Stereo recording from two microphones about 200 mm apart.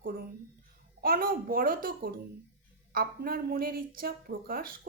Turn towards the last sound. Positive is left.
turn(degrees=-45)  # may be behind; listen again after turning